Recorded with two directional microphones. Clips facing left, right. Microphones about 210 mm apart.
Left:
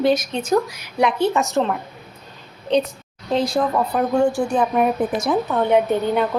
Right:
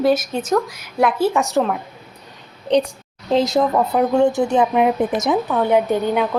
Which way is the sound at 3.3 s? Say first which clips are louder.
Right 3 dB; 25° right (ahead or behind).